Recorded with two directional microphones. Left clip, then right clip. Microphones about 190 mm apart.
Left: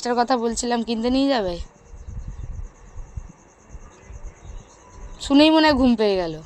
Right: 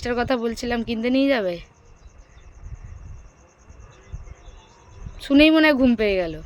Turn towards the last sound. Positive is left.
turn(degrees=-15)  # may be behind; listen again after turning